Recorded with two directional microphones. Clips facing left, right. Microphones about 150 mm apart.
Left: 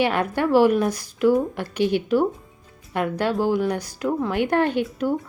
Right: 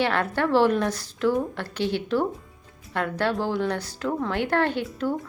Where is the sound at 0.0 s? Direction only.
15° left (ahead or behind).